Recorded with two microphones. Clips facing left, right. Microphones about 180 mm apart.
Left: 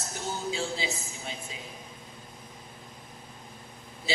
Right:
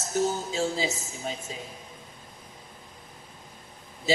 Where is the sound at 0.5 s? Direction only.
45° right (ahead or behind).